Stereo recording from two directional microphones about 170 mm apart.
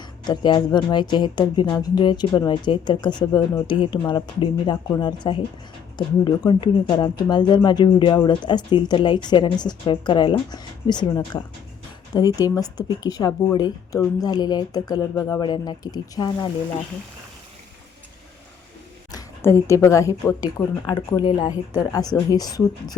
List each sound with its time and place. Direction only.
0.3 s speech: 25° left (ahead or behind)
19.1 s speech: 15° left (ahead or behind)